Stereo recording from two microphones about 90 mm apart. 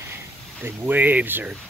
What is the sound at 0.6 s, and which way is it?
Speech, 20° right (ahead or behind).